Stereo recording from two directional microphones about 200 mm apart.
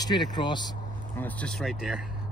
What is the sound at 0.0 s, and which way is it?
Speech, 20° left (ahead or behind).